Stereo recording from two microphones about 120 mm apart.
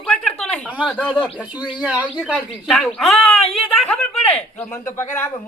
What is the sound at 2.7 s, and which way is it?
Speech, 5° left (ahead or behind).